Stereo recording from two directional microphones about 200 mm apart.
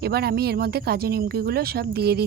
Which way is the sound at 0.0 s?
50° right (ahead or behind).